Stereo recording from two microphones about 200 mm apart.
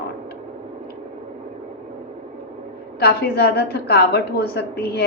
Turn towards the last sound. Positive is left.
turn(degrees=50)  # may be behind; listen again after turning